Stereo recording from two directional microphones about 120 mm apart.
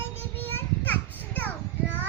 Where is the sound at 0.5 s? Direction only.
15° left (ahead or behind).